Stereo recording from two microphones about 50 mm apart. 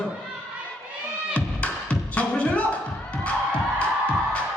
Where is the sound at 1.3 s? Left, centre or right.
Left.